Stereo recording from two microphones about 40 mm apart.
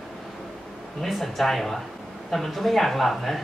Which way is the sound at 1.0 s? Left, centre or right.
Centre.